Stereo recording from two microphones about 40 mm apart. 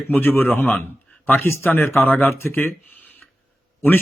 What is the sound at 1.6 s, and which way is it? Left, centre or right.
Speech, left.